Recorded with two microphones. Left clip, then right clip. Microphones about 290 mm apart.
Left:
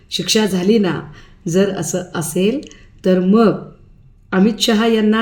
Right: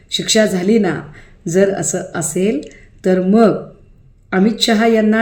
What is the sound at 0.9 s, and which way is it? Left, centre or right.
Speech, left.